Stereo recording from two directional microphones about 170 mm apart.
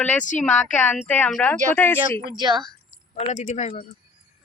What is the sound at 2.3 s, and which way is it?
Speech, 25° right (ahead or behind).